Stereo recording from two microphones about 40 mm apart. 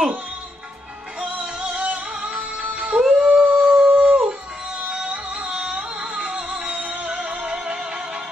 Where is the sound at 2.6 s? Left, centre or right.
Right.